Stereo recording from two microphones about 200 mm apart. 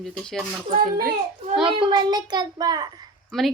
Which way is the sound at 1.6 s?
25° right (ahead or behind).